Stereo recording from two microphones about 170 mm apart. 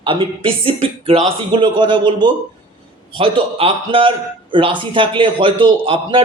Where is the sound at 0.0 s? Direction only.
30° right (ahead or behind).